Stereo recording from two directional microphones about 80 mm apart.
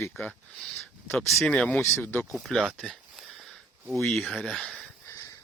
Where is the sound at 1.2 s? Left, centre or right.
Centre.